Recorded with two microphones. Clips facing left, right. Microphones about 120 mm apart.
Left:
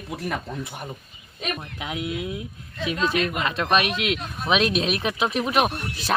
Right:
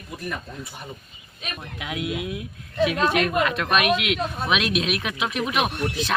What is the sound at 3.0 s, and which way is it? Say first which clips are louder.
Speech: left 1 dB; 60° right (ahead or behind).